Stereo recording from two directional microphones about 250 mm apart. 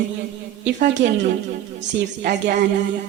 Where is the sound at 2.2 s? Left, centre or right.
Right.